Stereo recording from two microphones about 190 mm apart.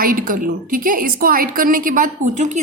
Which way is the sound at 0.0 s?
45° right (ahead or behind).